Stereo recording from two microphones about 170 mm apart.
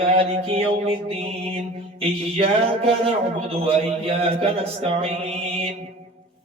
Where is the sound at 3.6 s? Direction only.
35° right (ahead or behind).